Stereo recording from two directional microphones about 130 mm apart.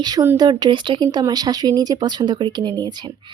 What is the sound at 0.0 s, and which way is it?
Speech, 30° right (ahead or behind).